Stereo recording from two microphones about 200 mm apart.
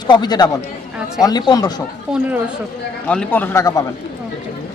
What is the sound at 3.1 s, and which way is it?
Speech, 5° left (ahead or behind).